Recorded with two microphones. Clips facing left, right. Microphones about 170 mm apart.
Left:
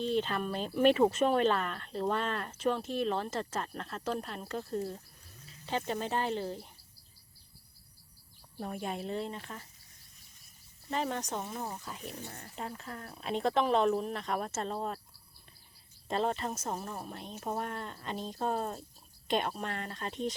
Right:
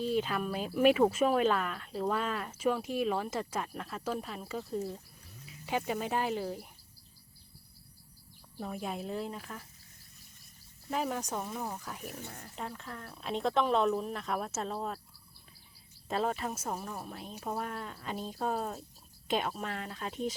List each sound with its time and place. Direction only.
0.0 s speech: 5° right (ahead or behind)
8.5 s speech: centre (ahead or behind)
10.9 s speech: 5° right (ahead or behind)
11.3 s speech: 10° left (ahead or behind)
11.9 s speech: 5° right (ahead or behind)
16.0 s speech: 5° right (ahead or behind)